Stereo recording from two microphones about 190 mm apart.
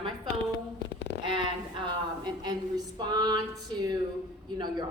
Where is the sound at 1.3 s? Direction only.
25° right (ahead or behind).